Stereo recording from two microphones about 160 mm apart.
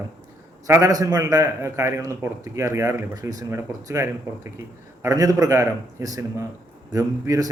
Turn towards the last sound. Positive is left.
turn(degrees=-20)  # may be behind; listen again after turning